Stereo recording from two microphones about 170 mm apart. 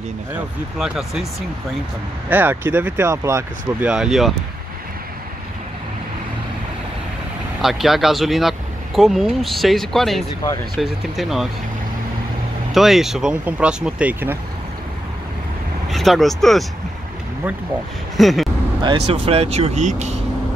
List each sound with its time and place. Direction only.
0.7 s speech: 5° right (ahead or behind)
2.2 s speech: 10° right (ahead or behind)
3.9 s speech: 5° right (ahead or behind)
7.6 s speech: centre (ahead or behind)
12.7 s speech: centre (ahead or behind)
15.9 s speech: centre (ahead or behind)
18.1 s vehicle: centre (ahead or behind)
18.8 s speech: 30° right (ahead or behind)